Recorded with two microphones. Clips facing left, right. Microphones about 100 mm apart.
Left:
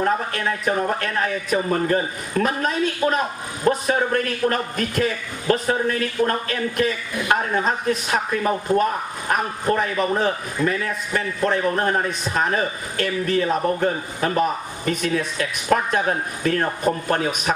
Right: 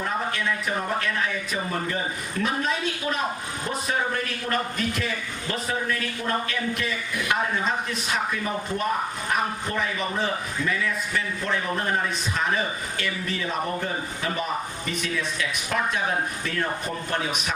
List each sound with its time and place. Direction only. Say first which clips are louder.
0.0 s a man's voice: left 5 dB; 45° left (ahead or behind)